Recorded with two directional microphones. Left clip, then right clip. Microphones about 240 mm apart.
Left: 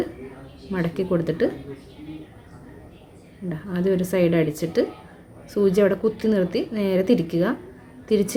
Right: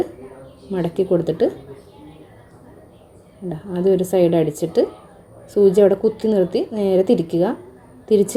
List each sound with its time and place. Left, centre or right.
0.7 s a woman's voice: centre
3.5 s a woman's voice: centre